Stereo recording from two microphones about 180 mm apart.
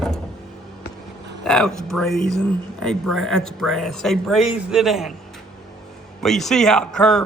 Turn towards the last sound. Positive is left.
turn(degrees=5)  # may be behind; listen again after turning